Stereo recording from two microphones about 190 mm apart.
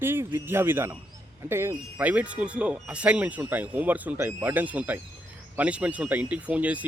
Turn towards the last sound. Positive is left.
turn(degrees=-5)  # may be behind; listen again after turning